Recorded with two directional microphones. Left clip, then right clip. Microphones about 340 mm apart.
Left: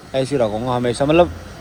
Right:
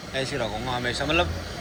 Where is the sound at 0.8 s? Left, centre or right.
Centre.